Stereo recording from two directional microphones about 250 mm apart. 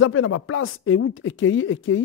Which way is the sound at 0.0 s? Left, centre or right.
Left.